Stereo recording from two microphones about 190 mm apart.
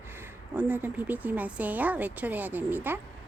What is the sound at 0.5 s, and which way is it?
Speech, 10° right (ahead or behind).